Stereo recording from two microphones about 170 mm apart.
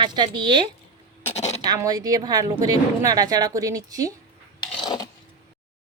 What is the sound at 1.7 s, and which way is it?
Speech, 20° right (ahead or behind).